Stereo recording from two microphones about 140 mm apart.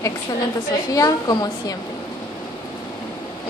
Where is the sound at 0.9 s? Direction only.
25° left (ahead or behind).